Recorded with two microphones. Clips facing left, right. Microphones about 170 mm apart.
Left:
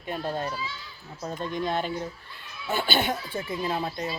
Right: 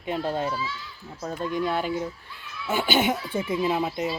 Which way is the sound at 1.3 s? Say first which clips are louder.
Right 2 dB; 10° right (ahead or behind).